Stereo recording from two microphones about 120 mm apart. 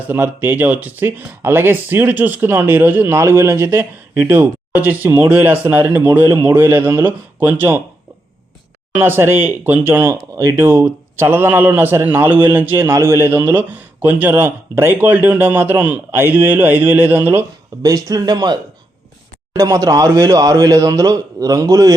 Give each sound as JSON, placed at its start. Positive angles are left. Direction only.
{"t": 0.0, "sound": "a man's voice", "side_deg": -15}
{"t": 8.9, "sound": "a man's voice", "side_deg": -15}
{"t": 17.8, "sound": "speech", "side_deg": -30}